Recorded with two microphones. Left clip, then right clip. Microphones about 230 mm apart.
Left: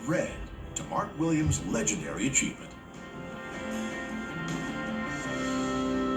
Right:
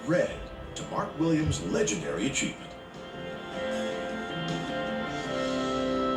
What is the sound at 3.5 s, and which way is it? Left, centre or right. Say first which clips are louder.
Music: right 5 dB; left.